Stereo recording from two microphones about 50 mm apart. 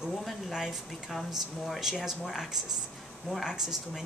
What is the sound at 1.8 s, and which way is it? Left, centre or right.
Speech, centre.